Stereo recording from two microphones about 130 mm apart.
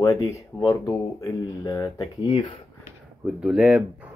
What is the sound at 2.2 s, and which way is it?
Speech, 40° left (ahead or behind).